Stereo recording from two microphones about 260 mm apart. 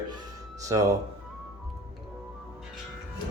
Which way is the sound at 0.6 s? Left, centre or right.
Centre.